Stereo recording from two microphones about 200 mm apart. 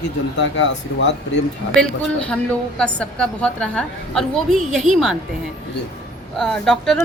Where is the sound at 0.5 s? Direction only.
65° left (ahead or behind).